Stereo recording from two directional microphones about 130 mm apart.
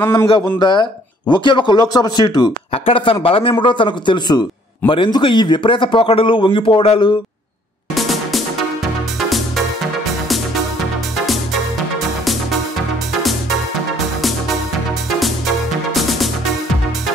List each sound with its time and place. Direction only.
0.0 s a man's voice: 15° left (ahead or behind)
0.6 s a man's voice: 35° left (ahead or behind)
2.7 s a man's voice: 45° left (ahead or behind)
7.9 s music: centre (ahead or behind)
15.0 s music: centre (ahead or behind)